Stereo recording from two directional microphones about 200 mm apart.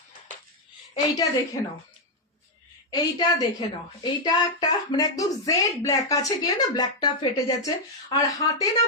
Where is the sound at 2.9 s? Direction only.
15° left (ahead or behind).